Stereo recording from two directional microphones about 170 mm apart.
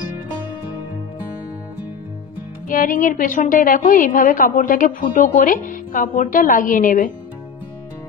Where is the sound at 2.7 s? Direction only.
55° left (ahead or behind).